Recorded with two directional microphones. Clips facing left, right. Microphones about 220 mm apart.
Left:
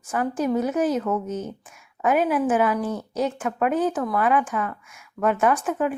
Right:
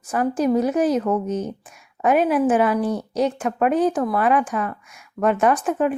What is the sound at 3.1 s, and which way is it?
Speech, 15° right (ahead or behind).